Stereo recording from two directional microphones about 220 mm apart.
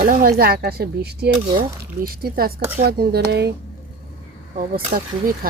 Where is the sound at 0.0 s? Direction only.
40° right (ahead or behind).